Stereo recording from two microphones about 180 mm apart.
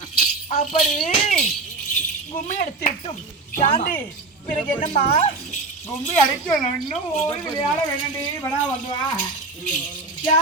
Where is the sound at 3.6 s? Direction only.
45° left (ahead or behind).